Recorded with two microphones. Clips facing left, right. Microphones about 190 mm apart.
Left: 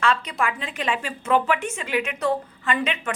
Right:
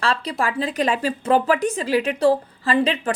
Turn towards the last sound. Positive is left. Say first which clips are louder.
# right 6 dB
turn(degrees=-35)  # may be behind; listen again after turning